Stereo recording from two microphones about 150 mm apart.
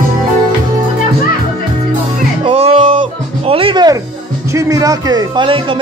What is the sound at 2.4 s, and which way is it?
Music, 40° right (ahead or behind).